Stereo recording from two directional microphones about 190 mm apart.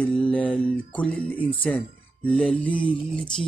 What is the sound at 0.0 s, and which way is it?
Music, 5° left (ahead or behind).